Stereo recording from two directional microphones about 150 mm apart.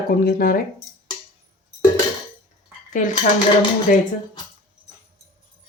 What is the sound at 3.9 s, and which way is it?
Speech, 60° left (ahead or behind).